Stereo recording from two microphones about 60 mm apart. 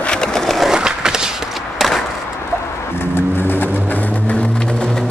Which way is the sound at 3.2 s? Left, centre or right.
Left.